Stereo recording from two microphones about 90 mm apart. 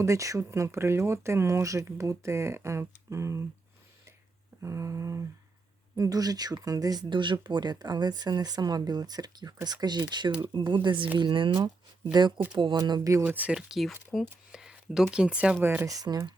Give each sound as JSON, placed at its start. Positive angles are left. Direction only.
{"t": 0.0, "sound": "speech", "side_deg": -35}
{"t": 4.6, "sound": "speech", "side_deg": -35}
{"t": 12.2, "sound": "speech", "side_deg": -55}
{"t": 12.7, "sound": "speech", "side_deg": -40}
{"t": 13.2, "sound": "speech", "side_deg": -15}
{"t": 13.6, "sound": "speech", "side_deg": -5}
{"t": 14.5, "sound": "a sound", "side_deg": -5}
{"t": 15.1, "sound": "speech", "side_deg": -10}
{"t": 15.6, "sound": "speech", "side_deg": -25}
{"t": 15.9, "sound": "speech", "side_deg": -40}